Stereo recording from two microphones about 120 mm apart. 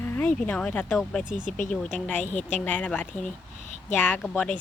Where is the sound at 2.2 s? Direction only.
80° left.